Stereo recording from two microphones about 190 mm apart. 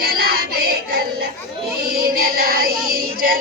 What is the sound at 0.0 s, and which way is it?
Child singing, 50° right (ahead or behind).